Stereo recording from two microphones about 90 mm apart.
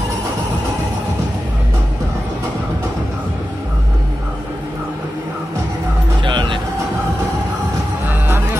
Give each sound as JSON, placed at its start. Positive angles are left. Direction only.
{"t": 6.2, "sound": "music", "side_deg": -60}